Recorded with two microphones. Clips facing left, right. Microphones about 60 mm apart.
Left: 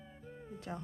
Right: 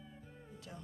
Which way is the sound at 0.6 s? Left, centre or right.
Left.